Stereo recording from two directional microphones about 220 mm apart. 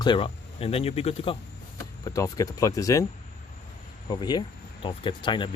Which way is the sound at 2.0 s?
15° left (ahead or behind).